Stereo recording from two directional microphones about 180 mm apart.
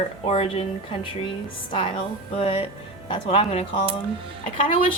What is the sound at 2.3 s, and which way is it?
Speech, 30° left (ahead or behind).